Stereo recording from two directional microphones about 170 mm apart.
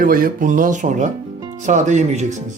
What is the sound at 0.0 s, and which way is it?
Speech, 55° right (ahead or behind).